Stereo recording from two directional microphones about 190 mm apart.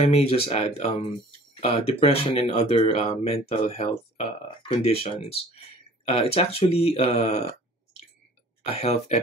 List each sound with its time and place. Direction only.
0.0 s speech: 30° left (ahead or behind)
8.6 s speech: 30° left (ahead or behind)